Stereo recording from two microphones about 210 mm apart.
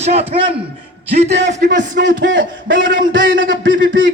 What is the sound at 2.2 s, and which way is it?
A man's voice, 60° right (ahead or behind).